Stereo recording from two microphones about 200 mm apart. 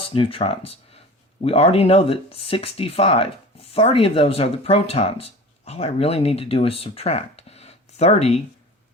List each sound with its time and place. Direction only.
0.1 s speech: 25° left (ahead or behind)